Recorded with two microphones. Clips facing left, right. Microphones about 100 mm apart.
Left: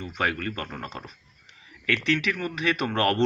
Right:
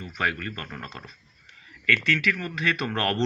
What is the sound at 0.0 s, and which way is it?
Speech, 30° left (ahead or behind).